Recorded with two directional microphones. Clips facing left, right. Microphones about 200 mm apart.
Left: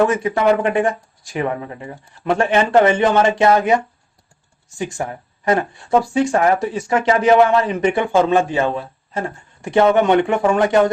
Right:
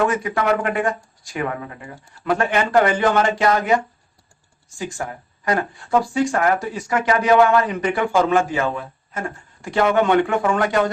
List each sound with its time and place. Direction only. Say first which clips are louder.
0.1 s speech: left 4 dB; 25° left (ahead or behind)
4.8 s speech: left 4 dB; 25° left (ahead or behind)